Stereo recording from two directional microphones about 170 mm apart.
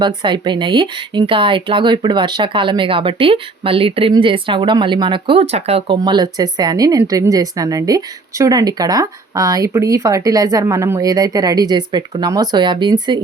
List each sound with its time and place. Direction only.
0.0 s a woman's voice: 30° right (ahead or behind)
6.0 s a woman's voice: 25° right (ahead or behind)